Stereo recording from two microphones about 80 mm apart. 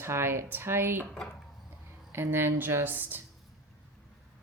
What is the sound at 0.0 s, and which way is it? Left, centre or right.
Speech, right.